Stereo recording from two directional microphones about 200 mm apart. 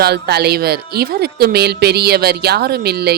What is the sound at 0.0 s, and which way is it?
Speech, 55° right (ahead or behind).